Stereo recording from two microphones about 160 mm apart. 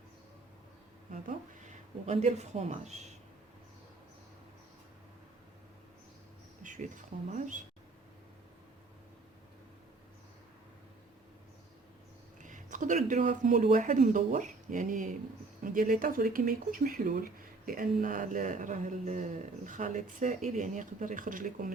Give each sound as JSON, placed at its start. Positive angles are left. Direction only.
{"t": 2.0, "sound": "speech", "side_deg": -45}
{"t": 6.6, "sound": "speech", "side_deg": -50}
{"t": 12.4, "sound": "speech", "side_deg": -55}